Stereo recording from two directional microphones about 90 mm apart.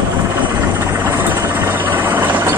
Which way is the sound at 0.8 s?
25° right (ahead or behind).